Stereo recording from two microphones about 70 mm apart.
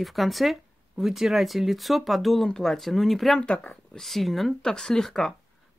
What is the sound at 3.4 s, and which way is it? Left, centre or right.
Speech, centre.